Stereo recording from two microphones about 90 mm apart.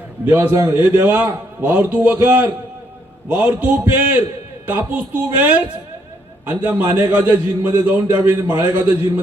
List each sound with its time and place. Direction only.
0.3 s a man's voice: 20° right (ahead or behind)